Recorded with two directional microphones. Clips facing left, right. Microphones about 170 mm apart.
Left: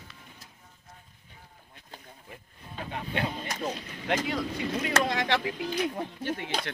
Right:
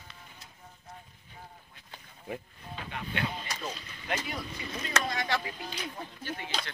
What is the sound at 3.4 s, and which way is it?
Speech, 55° left (ahead or behind).